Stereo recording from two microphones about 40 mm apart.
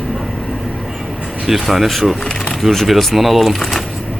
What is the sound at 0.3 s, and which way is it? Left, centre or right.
Vehicle, centre.